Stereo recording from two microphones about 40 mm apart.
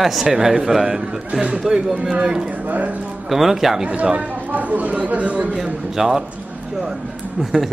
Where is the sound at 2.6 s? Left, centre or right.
Right.